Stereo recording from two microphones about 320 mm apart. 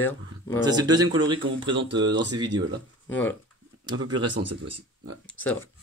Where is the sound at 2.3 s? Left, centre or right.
Centre.